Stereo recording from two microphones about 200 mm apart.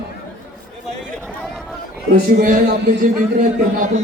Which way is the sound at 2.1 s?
45° right (ahead or behind).